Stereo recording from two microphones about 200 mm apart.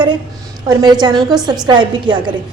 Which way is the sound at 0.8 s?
20° right (ahead or behind).